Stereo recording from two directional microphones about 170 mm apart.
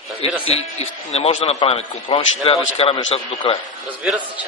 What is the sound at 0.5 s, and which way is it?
A man's voice, 35° left (ahead or behind).